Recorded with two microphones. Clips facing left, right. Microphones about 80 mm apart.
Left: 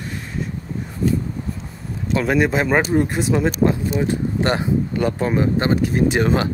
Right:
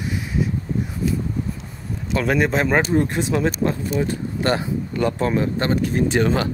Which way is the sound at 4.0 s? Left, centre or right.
Left.